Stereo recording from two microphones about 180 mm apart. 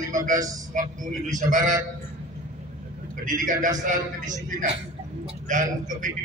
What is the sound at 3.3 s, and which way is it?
Speech, 45° right (ahead or behind).